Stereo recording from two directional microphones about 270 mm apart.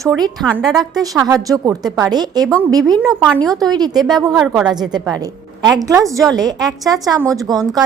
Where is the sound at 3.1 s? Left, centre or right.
Centre.